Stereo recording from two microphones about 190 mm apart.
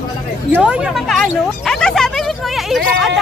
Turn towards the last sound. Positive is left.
turn(degrees=0)  # may be behind; listen again after turning